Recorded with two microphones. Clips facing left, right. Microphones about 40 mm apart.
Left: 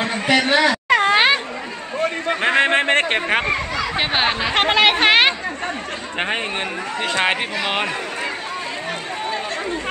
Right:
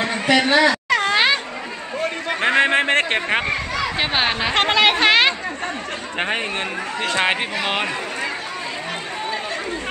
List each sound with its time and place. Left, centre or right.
0.0 s a sound: centre
0.5 s speech: centre
0.8 s a sound: left
2.4 s speech: centre
4.3 s speech: centre
4.6 s speech: centre
6.1 s speech: centre